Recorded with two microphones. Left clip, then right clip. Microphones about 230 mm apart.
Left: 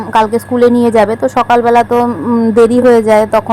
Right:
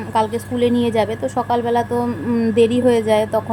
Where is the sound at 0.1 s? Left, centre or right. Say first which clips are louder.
Left 9 dB; left.